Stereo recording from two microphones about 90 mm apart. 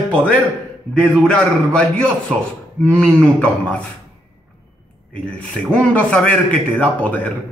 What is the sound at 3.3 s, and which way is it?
Speech, 15° left (ahead or behind).